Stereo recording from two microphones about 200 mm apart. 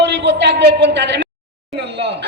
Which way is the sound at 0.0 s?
60° right (ahead or behind).